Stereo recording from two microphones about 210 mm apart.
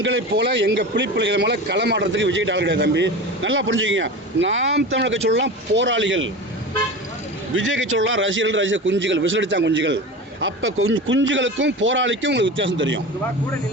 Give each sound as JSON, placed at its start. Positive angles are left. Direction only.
{"t": 0.0, "sound": "speech", "side_deg": -60}
{"t": 7.5, "sound": "speech", "side_deg": -65}
{"t": 10.4, "sound": "speech", "side_deg": -70}